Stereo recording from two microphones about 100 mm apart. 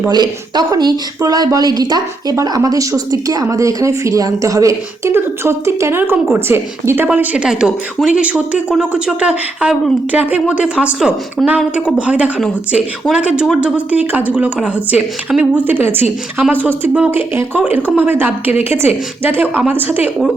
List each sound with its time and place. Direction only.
0.1 s speech: 40° right (ahead or behind)
2.3 s speech: 30° right (ahead or behind)
7.1 s speech: 10° right (ahead or behind)